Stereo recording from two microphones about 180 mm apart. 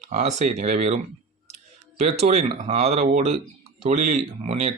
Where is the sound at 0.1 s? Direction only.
40° right (ahead or behind).